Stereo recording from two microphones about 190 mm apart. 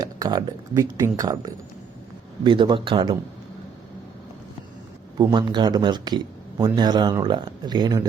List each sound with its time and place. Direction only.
0.0 s speech: 20° right (ahead or behind)
5.1 s speech: 25° right (ahead or behind)